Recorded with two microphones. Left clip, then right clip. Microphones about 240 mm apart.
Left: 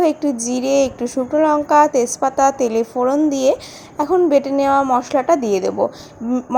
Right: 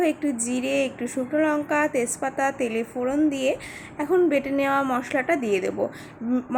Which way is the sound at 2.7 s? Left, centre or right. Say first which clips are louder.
Left 9 dB; centre.